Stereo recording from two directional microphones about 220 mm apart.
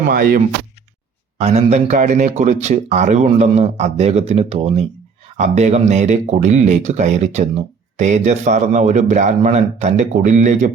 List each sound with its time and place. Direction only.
0.1 s speech: 40° right (ahead or behind)
1.4 s a man's voice: 30° right (ahead or behind)